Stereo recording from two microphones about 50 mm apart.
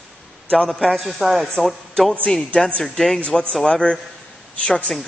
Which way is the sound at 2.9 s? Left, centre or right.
Centre.